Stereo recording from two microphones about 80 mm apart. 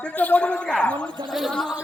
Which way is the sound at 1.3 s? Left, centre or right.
Centre.